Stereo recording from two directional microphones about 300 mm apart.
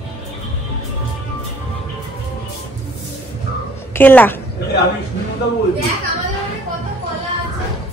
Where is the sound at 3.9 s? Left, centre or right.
Centre.